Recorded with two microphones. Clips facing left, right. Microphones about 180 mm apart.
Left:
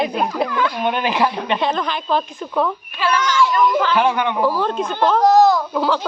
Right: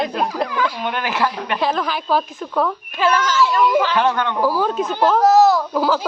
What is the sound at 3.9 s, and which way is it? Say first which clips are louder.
Speech: left 1 dB; 15° left (ahead or behind).